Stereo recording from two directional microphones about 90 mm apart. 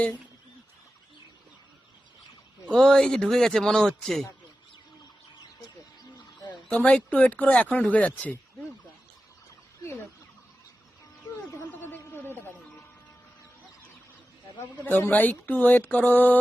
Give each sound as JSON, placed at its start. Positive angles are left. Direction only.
{"t": 2.6, "sound": "a man's voice", "side_deg": 5}
{"t": 6.7, "sound": "speech", "side_deg": 15}
{"t": 11.7, "sound": "a sound", "side_deg": 20}
{"t": 14.8, "sound": "speech", "side_deg": 20}